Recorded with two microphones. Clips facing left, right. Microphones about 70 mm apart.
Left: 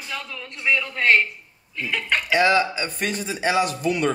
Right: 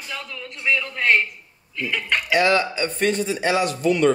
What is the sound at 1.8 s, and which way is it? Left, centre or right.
Speech, centre.